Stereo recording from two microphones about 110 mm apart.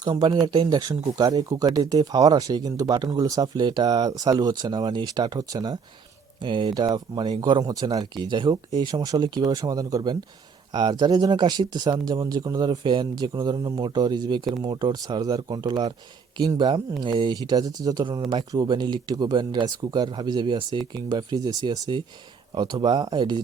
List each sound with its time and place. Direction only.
0.0 s speech: 45° right (ahead or behind)
6.4 s speech: 45° right (ahead or behind)